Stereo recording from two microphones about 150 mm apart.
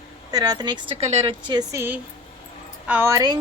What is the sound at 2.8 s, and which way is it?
Speech, 10° right (ahead or behind).